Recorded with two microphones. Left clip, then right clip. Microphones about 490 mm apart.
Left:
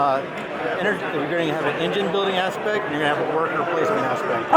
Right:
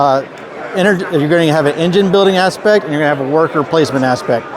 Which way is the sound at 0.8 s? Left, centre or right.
Right.